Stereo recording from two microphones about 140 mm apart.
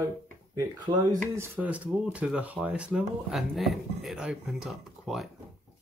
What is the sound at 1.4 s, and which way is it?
Speech, 10° right (ahead or behind).